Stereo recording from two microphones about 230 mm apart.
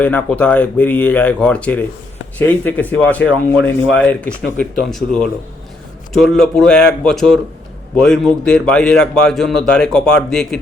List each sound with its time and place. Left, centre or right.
0.0 s a man's voice: centre
3.2 s speech: left
3.7 s a man's voice: centre